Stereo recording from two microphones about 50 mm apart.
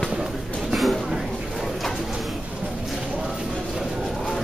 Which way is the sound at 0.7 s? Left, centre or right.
Centre.